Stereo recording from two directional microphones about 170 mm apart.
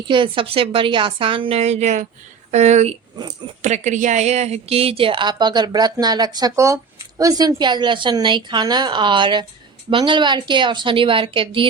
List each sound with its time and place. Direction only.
0.0 s a woman's voice: 30° right (ahead or behind)